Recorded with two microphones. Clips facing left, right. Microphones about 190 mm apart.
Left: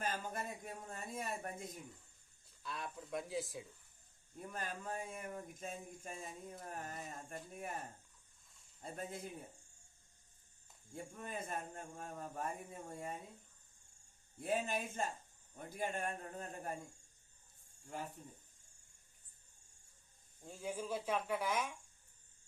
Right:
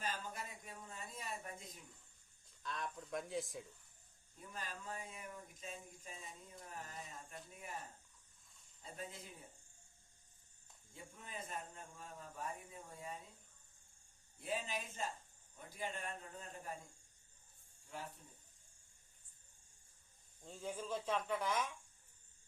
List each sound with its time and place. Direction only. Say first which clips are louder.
0.0 s speech: left 4 dB; 50° left (ahead or behind)
2.6 s speech: even; 5° left (ahead or behind)
4.4 s speech: left 5 dB; 50° left (ahead or behind)
8.8 s speech: left 5 dB; 50° left (ahead or behind)
10.9 s speech: left 6 dB; 50° left (ahead or behind)
14.4 s speech: left 5 dB; 50° left (ahead or behind)
17.8 s speech: left 4 dB; 50° left (ahead or behind)
20.4 s speech: left 2 dB; 10° left (ahead or behind)